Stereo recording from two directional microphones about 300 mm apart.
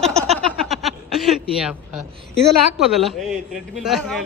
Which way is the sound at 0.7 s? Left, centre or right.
Centre.